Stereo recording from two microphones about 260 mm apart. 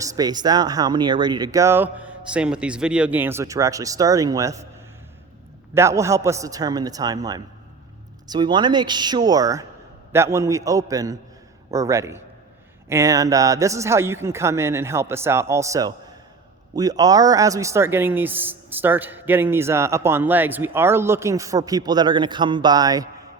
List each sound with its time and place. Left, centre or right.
0.0 s speech: centre
5.7 s speech: centre